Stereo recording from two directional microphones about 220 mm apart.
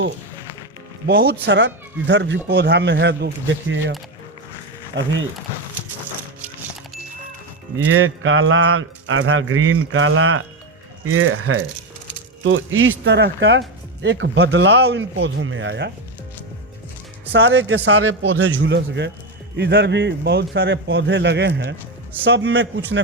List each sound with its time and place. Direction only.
1.0 s speech: 45° right (ahead or behind)
4.9 s speech: 50° right (ahead or behind)
7.9 s speech: 75° right (ahead or behind)
13.1 s speech: 50° right (ahead or behind)
17.3 s speech: 60° right (ahead or behind)
18.6 s speech: 50° right (ahead or behind)